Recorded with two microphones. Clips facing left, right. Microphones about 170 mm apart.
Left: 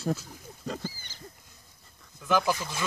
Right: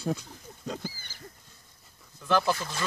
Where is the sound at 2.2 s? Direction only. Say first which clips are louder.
Even; 10° left (ahead or behind).